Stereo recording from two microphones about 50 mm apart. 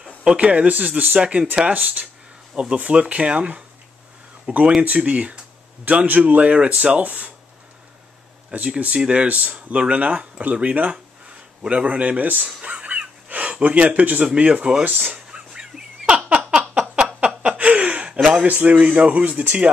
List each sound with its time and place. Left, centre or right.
0.0 s speech: centre
8.6 s speech: right
12.6 s a sound: right
14.4 s speech: right
15.1 s a sound: centre
18.5 s speech: right
18.8 s speech: right